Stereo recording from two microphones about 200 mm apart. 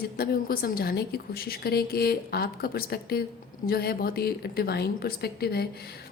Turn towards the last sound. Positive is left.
turn(degrees=50)  # may be behind; listen again after turning